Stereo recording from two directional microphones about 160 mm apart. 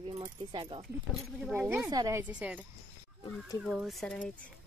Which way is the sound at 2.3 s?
10° right (ahead or behind).